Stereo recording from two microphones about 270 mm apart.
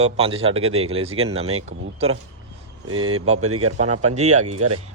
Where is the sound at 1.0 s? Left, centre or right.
Right.